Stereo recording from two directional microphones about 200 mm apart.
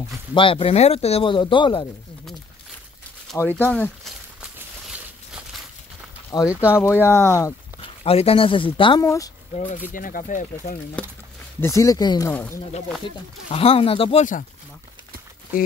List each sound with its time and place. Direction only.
0.3 s speech: 25° left (ahead or behind)
3.3 s speech: 10° left (ahead or behind)
4.4 s a sound: 5° right (ahead or behind)
6.3 s speech: 20° left (ahead or behind)
8.0 s speech: 30° left (ahead or behind)
9.9 s speech: 45° left (ahead or behind)
11.6 s speech: 15° left (ahead or behind)
13.5 s speech: 30° left (ahead or behind)